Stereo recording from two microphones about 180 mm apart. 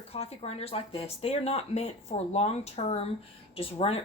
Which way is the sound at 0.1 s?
35° left (ahead or behind).